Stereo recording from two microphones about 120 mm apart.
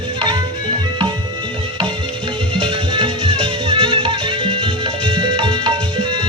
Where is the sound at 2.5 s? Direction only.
45° right (ahead or behind).